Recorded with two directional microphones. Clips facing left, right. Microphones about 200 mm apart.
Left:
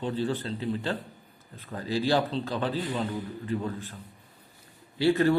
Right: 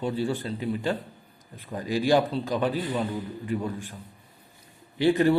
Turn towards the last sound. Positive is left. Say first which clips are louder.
# right 2 dB
turn(degrees=-15)  # may be behind; listen again after turning